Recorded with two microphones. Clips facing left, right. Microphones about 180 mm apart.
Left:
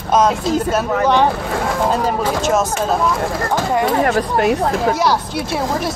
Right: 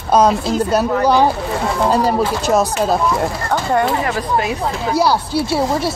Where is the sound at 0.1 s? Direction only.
35° right (ahead or behind).